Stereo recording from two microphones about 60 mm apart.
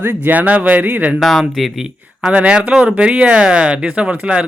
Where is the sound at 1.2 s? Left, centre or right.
Centre.